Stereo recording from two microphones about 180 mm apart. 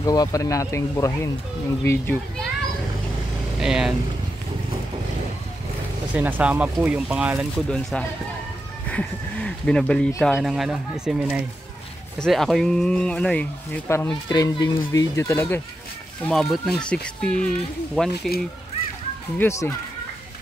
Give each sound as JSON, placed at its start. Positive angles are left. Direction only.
{"t": 0.0, "sound": "speech", "side_deg": 20}
{"t": 3.5, "sound": "speech", "side_deg": -5}
{"t": 6.1, "sound": "speech", "side_deg": -10}
{"t": 16.3, "sound": "speech", "side_deg": 0}
{"t": 19.3, "sound": "speech", "side_deg": 15}